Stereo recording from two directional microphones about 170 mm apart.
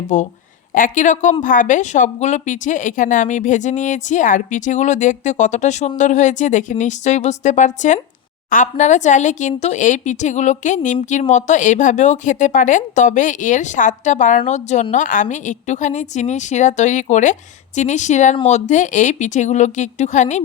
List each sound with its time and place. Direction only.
0.1 s speech: 45° left (ahead or behind)